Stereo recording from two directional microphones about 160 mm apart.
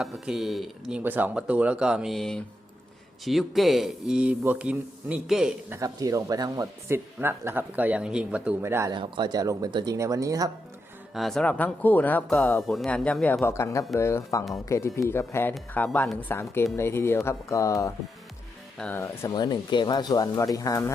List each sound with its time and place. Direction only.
0.0 s speech: centre (ahead or behind)
5.7 s speech: 20° right (ahead or behind)
8.9 s speech: 30° right (ahead or behind)
11.1 s speech: centre (ahead or behind)
13.4 s speech: 20° left (ahead or behind)
18.9 s speech: 15° left (ahead or behind)
19.3 s speech: 25° left (ahead or behind)